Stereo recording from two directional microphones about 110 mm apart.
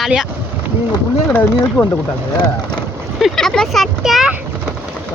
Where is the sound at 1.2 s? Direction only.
20° left (ahead or behind).